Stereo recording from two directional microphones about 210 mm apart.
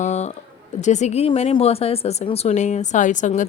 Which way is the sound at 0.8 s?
35° left (ahead or behind).